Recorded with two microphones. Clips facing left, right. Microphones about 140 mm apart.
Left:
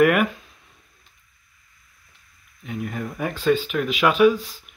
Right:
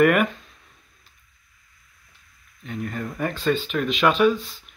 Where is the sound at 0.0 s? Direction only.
5° left (ahead or behind).